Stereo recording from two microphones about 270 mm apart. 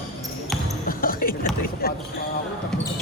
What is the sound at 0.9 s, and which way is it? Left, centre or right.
Music, left.